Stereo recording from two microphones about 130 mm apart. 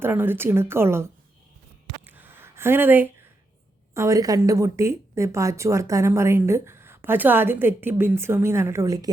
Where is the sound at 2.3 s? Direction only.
20° right (ahead or behind).